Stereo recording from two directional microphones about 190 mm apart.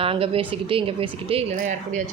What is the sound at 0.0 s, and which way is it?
A woman's voice, 30° right (ahead or behind).